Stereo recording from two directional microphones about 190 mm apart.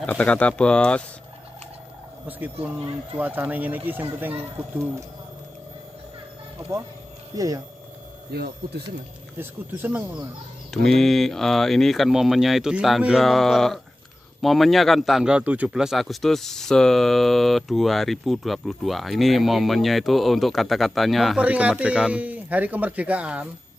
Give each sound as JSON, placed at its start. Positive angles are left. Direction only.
{"t": 0.0, "sound": "speech", "side_deg": 5}
{"t": 3.2, "sound": "speech", "side_deg": -10}
{"t": 7.3, "sound": "speech", "side_deg": -20}
{"t": 8.3, "sound": "speech", "side_deg": -60}
{"t": 9.4, "sound": "speech", "side_deg": -10}
{"t": 10.7, "sound": "speech", "side_deg": 0}